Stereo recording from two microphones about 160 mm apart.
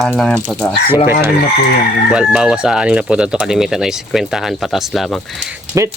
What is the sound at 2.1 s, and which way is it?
Speech, 5° right (ahead or behind).